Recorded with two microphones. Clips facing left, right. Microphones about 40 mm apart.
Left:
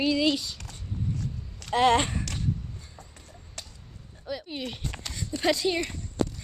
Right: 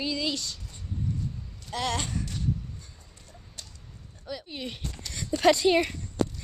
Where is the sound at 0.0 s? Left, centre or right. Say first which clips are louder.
Left 6 dB; centre.